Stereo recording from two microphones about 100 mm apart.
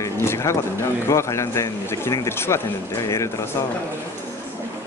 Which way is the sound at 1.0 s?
30° left (ahead or behind).